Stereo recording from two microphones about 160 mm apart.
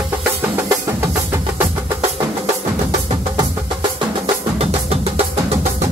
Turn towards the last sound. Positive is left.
turn(degrees=-40)  # may be behind; listen again after turning